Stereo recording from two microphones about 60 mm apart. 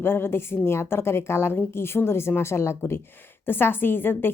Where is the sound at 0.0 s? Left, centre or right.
Left.